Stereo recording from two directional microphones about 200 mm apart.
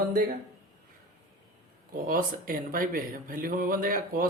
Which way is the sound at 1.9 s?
45° right (ahead or behind).